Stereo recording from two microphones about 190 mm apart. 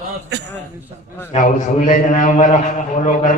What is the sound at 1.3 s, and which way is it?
A man's voice, 40° left (ahead or behind).